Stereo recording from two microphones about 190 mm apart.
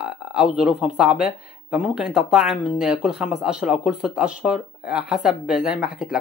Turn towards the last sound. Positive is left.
turn(degrees=-5)  # may be behind; listen again after turning